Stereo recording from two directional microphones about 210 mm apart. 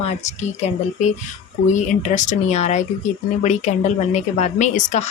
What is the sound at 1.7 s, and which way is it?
Speech, 35° left (ahead or behind).